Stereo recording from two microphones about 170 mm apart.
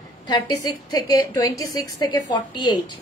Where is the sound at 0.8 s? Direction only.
20° left (ahead or behind).